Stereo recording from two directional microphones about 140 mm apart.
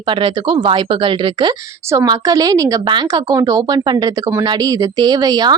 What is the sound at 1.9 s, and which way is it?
A woman's voice, 25° right (ahead or behind).